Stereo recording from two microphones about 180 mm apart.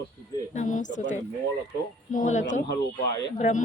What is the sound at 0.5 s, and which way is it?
Speech, 45° left (ahead or behind).